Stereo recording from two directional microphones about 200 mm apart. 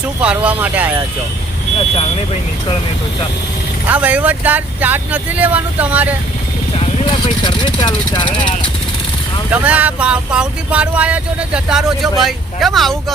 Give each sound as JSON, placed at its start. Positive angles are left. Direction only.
{"t": 0.2, "sound": "speech", "side_deg": -5}
{"t": 2.0, "sound": "speech", "side_deg": 30}
{"t": 3.8, "sound": "speech", "side_deg": -5}
{"t": 7.4, "sound": "speech", "side_deg": 20}
{"t": 9.5, "sound": "speech", "side_deg": -5}